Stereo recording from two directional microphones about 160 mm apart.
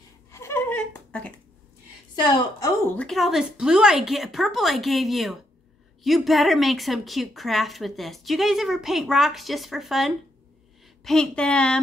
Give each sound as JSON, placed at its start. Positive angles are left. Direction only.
{"t": 0.3, "sound": "a sound", "side_deg": 15}
{"t": 2.2, "sound": "a woman's voice", "side_deg": 20}
{"t": 3.0, "sound": "a woman's voice", "side_deg": 0}